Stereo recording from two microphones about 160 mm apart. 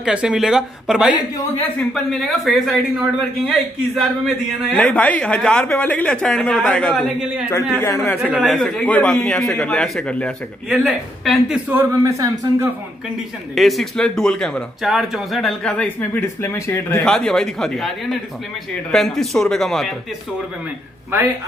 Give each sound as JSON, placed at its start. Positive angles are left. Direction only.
{"t": 0.0, "sound": "speech", "side_deg": -5}
{"t": 8.2, "sound": "speech", "side_deg": -5}
{"t": 8.5, "sound": "speech", "side_deg": 10}
{"t": 11.9, "sound": "speech", "side_deg": -20}
{"t": 13.6, "sound": "speech", "side_deg": 0}
{"t": 17.0, "sound": "speech", "side_deg": 5}